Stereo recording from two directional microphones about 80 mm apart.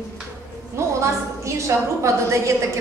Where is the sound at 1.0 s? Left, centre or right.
Right.